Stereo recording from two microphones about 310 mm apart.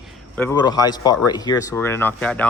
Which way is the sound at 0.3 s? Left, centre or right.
Centre.